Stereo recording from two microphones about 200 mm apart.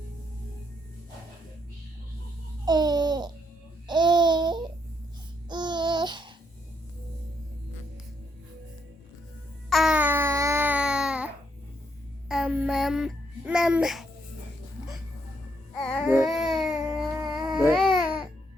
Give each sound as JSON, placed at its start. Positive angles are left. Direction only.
{"t": 2.6, "sound": "babbling", "side_deg": -20}
{"t": 9.6, "sound": "babbling", "side_deg": 0}
{"t": 12.3, "sound": "babbling", "side_deg": -5}
{"t": 16.0, "sound": "baby cry", "side_deg": -5}
{"t": 17.2, "sound": "a sound", "side_deg": -20}
{"t": 17.7, "sound": "babbling", "side_deg": -5}